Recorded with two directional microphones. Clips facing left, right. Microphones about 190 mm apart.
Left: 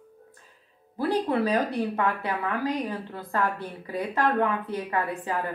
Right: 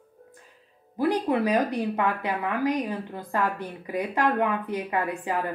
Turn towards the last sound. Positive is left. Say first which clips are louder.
# right 1 dB
turn(degrees=-15)  # may be behind; listen again after turning